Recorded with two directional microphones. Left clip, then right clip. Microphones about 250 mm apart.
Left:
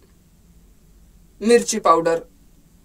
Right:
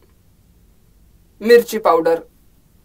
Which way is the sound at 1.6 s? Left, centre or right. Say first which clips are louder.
Right 1 dB; centre.